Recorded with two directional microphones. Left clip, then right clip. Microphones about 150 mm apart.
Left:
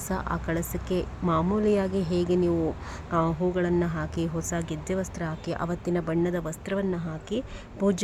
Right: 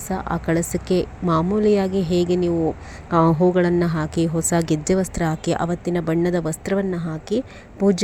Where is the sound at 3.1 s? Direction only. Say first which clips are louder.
Right 9 dB; 40° right (ahead or behind).